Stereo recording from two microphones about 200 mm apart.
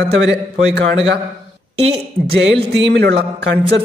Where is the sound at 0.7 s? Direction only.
60° right (ahead or behind).